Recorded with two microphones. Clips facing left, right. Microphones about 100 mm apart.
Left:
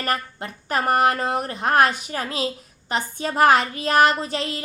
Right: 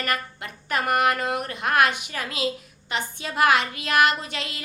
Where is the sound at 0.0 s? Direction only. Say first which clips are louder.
Left 3 dB; 35° left (ahead or behind).